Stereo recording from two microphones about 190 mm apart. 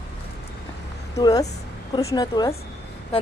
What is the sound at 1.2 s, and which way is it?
Speech, 20° left (ahead or behind).